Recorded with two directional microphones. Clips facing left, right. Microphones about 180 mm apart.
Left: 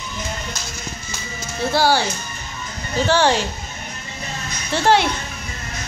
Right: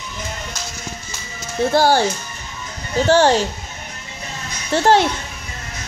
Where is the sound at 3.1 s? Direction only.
45° right (ahead or behind).